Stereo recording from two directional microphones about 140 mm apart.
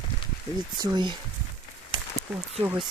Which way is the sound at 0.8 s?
30° right (ahead or behind).